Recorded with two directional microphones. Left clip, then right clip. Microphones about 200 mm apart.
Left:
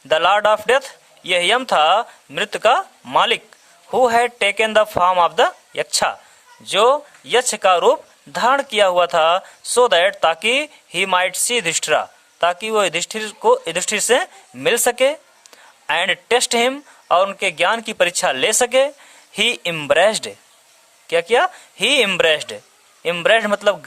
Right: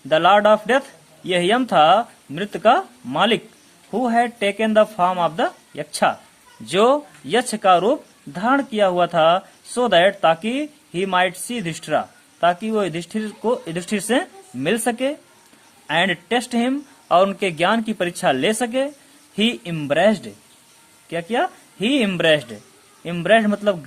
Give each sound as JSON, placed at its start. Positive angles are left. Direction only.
{"t": 0.1, "sound": "speech", "side_deg": 35}
{"t": 6.7, "sound": "speech", "side_deg": 25}